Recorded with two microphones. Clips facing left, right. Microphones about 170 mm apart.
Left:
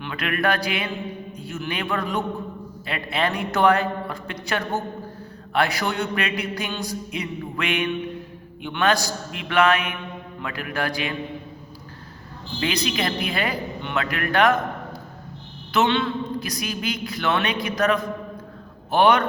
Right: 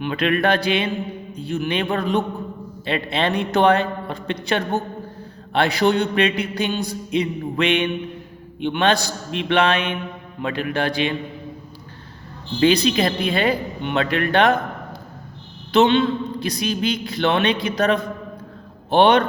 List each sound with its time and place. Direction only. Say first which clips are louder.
0.0 s a man's voice: right 5 dB; 25° right (ahead or behind)
12.5 s a man's voice: right 8 dB; 30° right (ahead or behind)
15.7 s a man's voice: right 5 dB; 25° right (ahead or behind)